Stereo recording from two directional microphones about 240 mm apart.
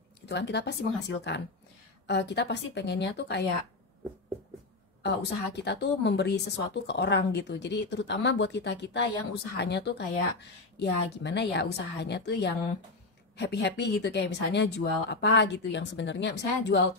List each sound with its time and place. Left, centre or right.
0.3 s a woman's voice: left
5.0 s a woman's voice: left